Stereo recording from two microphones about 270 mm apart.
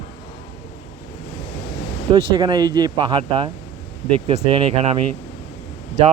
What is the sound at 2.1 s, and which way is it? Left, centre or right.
Speech, centre.